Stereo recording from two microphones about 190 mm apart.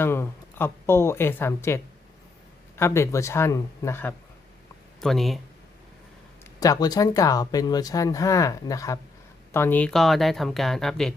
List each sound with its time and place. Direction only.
0.0 s speech: 10° left (ahead or behind)
4.9 s speech: centre (ahead or behind)
6.6 s speech: 20° left (ahead or behind); by 11.1 s centre (ahead or behind)